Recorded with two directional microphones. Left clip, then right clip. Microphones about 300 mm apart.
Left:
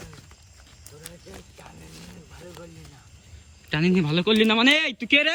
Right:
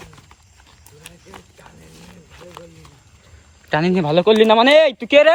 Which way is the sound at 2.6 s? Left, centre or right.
Centre.